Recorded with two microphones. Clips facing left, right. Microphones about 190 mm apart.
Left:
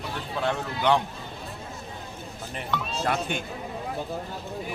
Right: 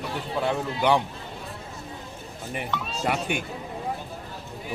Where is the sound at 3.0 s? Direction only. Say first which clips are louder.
Right 2 dB; 10° right (ahead or behind).